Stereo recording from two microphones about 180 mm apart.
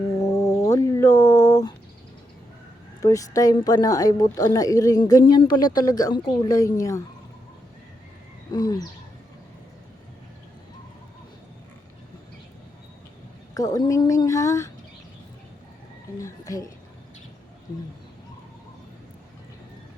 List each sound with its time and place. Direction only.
0.3 s a sound: 15° left (ahead or behind)
3.0 s a woman's voice: 20° left (ahead or behind)
8.5 s a woman's voice: 20° left (ahead or behind)
13.5 s a woman's voice: 20° left (ahead or behind)
16.1 s a woman's voice: 20° left (ahead or behind)